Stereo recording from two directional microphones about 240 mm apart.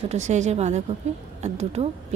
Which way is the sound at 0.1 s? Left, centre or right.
Right.